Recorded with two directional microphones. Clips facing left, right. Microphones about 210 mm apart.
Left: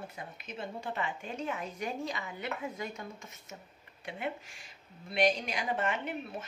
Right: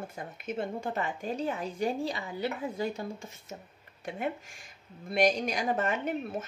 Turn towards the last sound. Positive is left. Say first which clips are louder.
# right 4 dB
turn(degrees=-40)  # may be behind; listen again after turning